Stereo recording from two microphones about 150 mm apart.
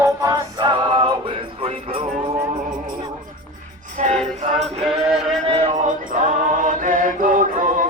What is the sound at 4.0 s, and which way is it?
Music, 55° right (ahead or behind).